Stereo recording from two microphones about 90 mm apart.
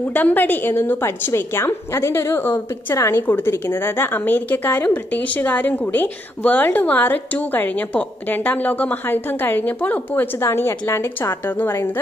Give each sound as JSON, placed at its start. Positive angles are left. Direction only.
{"t": 0.1, "sound": "a woman's voice", "side_deg": 20}